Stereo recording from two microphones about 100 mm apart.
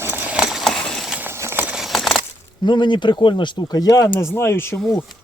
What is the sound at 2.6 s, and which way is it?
Speech, 50° left (ahead or behind).